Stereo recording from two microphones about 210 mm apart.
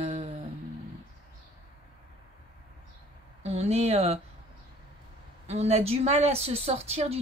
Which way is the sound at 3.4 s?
30° right (ahead or behind).